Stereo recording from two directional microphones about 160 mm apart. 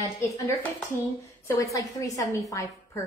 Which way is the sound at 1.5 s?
20° left (ahead or behind).